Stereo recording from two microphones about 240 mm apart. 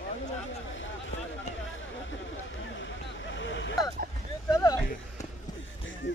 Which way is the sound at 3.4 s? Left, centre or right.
Left.